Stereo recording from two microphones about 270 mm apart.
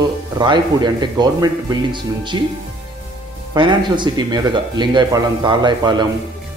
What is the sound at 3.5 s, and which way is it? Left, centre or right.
Speech, centre.